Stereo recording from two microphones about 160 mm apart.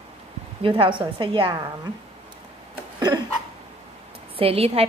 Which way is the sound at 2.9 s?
25° right (ahead or behind).